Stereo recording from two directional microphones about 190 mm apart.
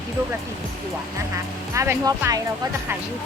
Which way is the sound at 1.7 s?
15° right (ahead or behind).